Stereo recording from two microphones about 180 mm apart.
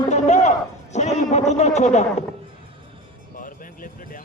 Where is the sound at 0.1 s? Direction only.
40° left (ahead or behind).